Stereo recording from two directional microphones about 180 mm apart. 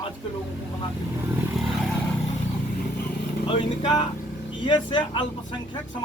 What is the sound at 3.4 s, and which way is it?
Speech, 25° left (ahead or behind).